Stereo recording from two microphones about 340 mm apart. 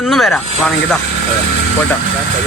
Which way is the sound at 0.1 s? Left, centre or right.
Centre.